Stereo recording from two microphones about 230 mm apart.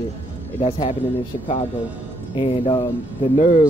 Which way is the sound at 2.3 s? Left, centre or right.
Left.